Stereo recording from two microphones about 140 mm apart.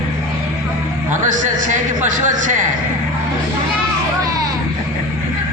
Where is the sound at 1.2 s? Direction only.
65° right (ahead or behind).